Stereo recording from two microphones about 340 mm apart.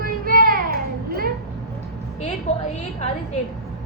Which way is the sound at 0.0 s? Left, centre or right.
Right.